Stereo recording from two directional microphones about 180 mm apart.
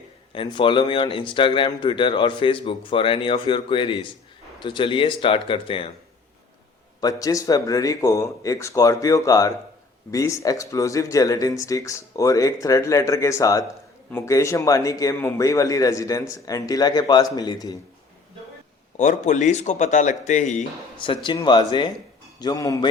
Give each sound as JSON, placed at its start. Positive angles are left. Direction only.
{"t": 0.3, "sound": "speech", "side_deg": 30}
{"t": 7.0, "sound": "speech", "side_deg": 20}
{"t": 18.9, "sound": "speech", "side_deg": 40}
{"t": 21.2, "sound": "speech", "side_deg": 25}